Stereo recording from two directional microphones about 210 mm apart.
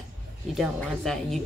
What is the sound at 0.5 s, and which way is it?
Speech, centre (ahead or behind).